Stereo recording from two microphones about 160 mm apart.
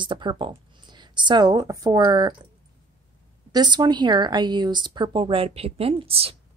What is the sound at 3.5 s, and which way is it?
Speech, 25° right (ahead or behind).